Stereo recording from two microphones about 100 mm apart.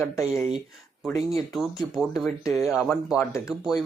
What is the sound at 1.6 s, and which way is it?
Speech, 5° right (ahead or behind).